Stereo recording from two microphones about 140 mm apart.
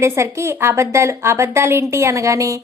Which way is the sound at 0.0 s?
20° right (ahead or behind).